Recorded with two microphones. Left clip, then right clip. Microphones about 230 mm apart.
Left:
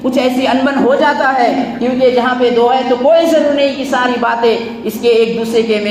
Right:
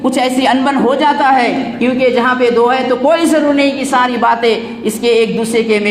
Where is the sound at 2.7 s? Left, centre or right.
Right.